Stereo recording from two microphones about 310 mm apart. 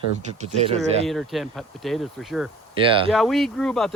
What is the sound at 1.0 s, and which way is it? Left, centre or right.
Speech, centre.